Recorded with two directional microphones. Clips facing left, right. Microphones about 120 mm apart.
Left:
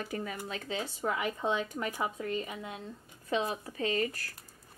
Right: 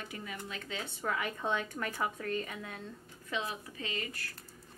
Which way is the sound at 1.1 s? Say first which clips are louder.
Left 2 dB; 20° left (ahead or behind).